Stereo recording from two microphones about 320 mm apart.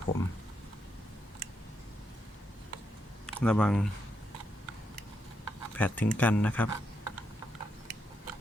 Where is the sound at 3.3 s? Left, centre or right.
Centre.